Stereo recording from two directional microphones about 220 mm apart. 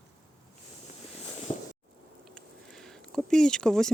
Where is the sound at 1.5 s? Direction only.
20° left (ahead or behind).